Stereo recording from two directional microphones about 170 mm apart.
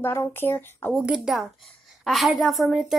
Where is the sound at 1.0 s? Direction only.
5° right (ahead or behind).